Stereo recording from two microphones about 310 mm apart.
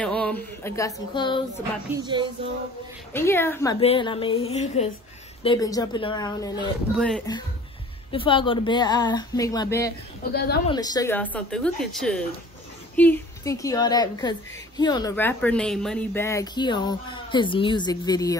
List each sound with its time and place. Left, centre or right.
0.0 s speech: centre
2.0 s a sound: centre
3.1 s a woman's voice: centre
10.3 s a woman's voice: left
10.7 s a woman's voice: centre